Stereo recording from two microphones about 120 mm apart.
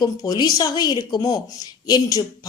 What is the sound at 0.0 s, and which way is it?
Speech, 35° left (ahead or behind).